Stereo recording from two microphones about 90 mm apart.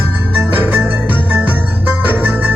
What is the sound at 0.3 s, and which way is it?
Music, 20° right (ahead or behind).